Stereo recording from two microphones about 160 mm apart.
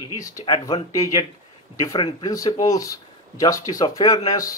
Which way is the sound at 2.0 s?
35° left (ahead or behind).